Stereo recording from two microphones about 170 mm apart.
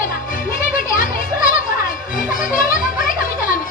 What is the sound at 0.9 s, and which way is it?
Children playing, 55° left (ahead or behind).